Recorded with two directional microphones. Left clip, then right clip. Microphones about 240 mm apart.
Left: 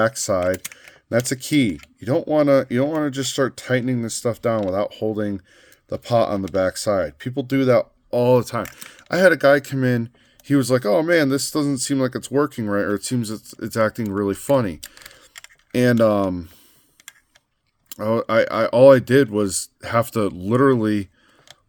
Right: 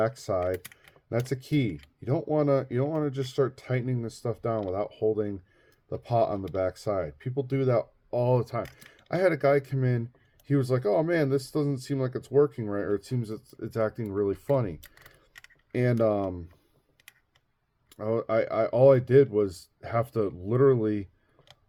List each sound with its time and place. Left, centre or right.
0.0 s speech: left
17.8 s speech: left